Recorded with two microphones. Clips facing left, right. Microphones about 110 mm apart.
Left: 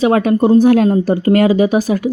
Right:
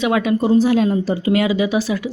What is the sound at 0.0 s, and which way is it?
Speech, 40° left (ahead or behind).